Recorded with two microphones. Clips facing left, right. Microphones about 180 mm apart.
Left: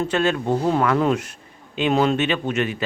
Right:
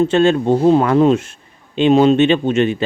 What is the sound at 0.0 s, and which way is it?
Speech, 25° right (ahead or behind).